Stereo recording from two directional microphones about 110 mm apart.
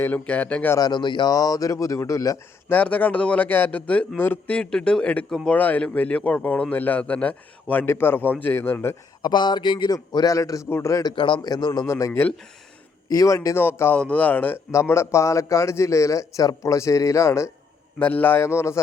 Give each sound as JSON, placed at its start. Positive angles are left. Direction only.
{"t": 0.0, "sound": "a man's voice", "side_deg": 15}
{"t": 0.8, "sound": "a man's voice", "side_deg": 40}
{"t": 2.6, "sound": "a man's voice", "side_deg": 15}
{"t": 9.2, "sound": "a man's voice", "side_deg": 45}
{"t": 11.1, "sound": "a man's voice", "side_deg": 50}
{"t": 11.4, "sound": "a man's voice", "side_deg": 35}
{"t": 11.9, "sound": "a man's voice", "side_deg": 25}
{"t": 18.0, "sound": "a man's voice", "side_deg": 15}